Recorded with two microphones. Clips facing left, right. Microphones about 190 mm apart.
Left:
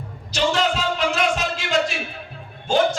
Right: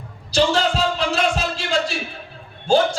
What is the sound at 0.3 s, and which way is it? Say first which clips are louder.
Music: right 3 dB; 30° right (ahead or behind).